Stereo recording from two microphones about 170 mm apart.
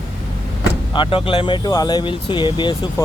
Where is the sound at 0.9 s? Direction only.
30° left (ahead or behind).